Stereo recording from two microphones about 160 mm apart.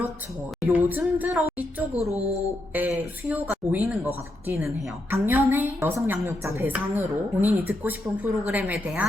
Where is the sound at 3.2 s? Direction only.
10° right (ahead or behind).